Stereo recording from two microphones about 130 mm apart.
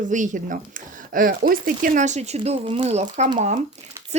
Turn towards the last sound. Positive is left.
turn(degrees=-70)  # may be behind; listen again after turning